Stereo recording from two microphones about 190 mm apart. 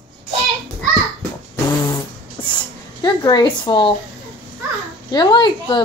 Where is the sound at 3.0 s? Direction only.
25° left (ahead or behind).